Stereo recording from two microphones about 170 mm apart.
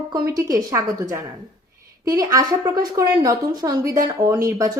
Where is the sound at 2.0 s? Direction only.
20° right (ahead or behind).